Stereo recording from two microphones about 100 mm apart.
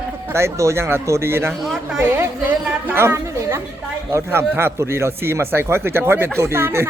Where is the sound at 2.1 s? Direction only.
20° right (ahead or behind).